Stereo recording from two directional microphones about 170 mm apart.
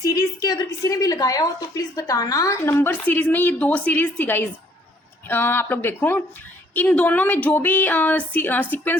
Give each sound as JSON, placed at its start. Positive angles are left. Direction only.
{"t": 0.0, "sound": "a woman's voice", "side_deg": 20}